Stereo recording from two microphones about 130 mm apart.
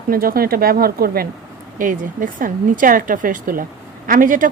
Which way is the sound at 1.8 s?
90° right.